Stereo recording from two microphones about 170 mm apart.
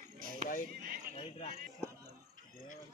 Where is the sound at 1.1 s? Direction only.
30° left (ahead or behind).